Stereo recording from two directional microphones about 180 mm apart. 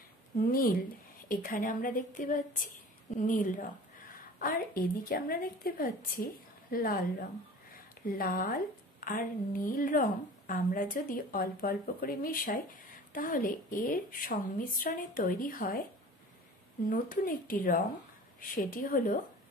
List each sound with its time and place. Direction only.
0.4 s a woman's voice: 55° left (ahead or behind)
16.9 s a woman's voice: 50° left (ahead or behind)